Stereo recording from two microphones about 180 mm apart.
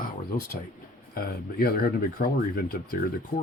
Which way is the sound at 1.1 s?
55° left (ahead or behind).